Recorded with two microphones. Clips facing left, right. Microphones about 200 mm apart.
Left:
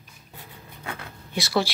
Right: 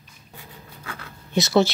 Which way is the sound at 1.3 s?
20° right (ahead or behind).